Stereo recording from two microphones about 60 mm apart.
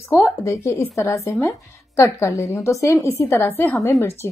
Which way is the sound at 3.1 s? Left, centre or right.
Left.